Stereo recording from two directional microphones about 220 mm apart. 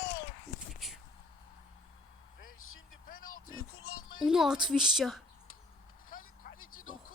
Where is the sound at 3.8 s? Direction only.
75° left (ahead or behind).